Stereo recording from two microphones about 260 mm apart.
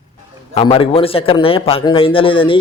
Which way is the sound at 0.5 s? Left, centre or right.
Left.